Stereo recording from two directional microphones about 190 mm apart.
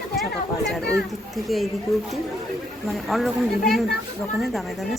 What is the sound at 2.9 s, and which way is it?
A woman's voice, centre (ahead or behind).